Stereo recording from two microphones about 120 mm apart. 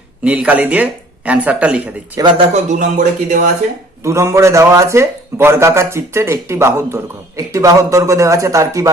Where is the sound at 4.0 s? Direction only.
25° right (ahead or behind).